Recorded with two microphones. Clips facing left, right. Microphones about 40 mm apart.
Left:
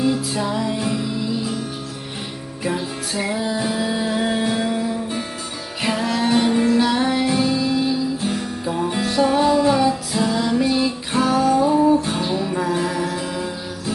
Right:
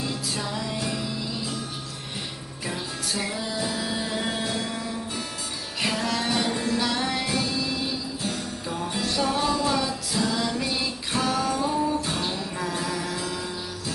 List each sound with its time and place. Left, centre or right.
0.0 s music: centre
2.6 s music: left
9.0 s music: centre
11.6 s music: left